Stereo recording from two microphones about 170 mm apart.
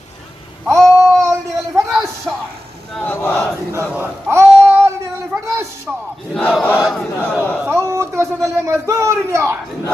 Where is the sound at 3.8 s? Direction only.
10° right (ahead or behind).